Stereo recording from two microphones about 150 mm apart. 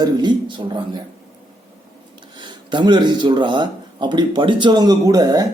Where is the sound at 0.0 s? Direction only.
30° right (ahead or behind).